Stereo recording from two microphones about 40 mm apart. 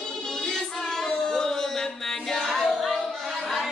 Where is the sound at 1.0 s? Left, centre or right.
Centre.